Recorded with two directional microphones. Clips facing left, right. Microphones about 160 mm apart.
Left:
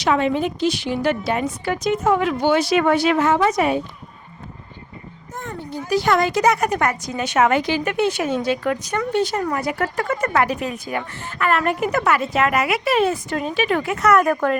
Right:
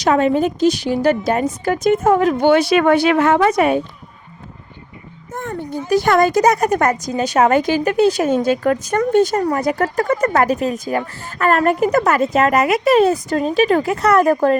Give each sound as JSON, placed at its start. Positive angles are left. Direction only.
{"t": 0.0, "sound": "a woman's voice", "side_deg": -45}
{"t": 2.5, "sound": "speech", "side_deg": -60}
{"t": 5.3, "sound": "a sound", "side_deg": -50}
{"t": 5.9, "sound": "a woman's voice", "side_deg": -50}